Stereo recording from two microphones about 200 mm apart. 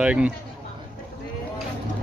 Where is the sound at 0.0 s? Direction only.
5° right (ahead or behind).